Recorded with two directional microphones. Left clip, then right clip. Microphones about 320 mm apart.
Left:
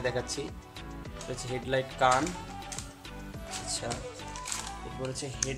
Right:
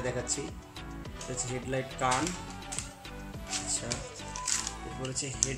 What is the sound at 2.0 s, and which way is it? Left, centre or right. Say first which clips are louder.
Speech: left 5 dB; left.